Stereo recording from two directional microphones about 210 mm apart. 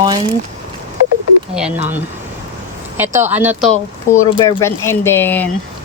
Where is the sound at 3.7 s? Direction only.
90° left.